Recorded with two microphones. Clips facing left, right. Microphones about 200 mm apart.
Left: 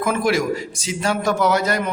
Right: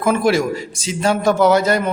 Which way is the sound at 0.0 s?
30° right (ahead or behind).